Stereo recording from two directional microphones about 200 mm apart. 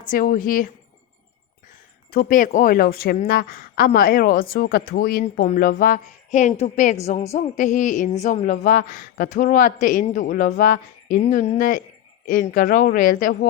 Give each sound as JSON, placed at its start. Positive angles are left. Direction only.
{"t": 0.1, "sound": "speech", "side_deg": 45}
{"t": 2.0, "sound": "a woman's voice", "side_deg": 45}